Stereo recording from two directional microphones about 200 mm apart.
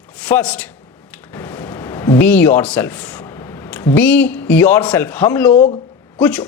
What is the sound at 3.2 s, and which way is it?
A man's voice, 20° left (ahead or behind).